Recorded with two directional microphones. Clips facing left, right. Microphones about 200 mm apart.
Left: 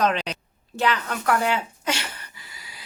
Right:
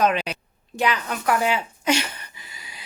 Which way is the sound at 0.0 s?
10° right (ahead or behind).